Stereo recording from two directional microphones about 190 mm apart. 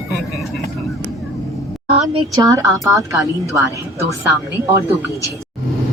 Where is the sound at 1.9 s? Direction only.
25° right (ahead or behind).